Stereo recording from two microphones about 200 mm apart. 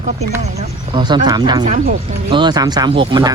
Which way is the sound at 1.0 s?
20° right (ahead or behind).